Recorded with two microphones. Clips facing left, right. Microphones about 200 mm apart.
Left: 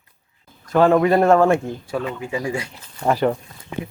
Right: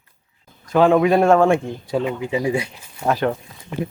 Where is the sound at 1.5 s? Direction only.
20° right (ahead or behind).